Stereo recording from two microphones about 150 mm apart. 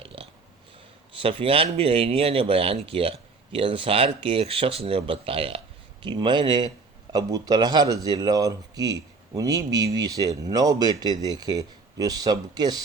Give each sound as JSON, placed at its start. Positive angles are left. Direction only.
{"t": 0.0, "sound": "dog", "side_deg": -40}
{"t": 1.1, "sound": "speech", "side_deg": -35}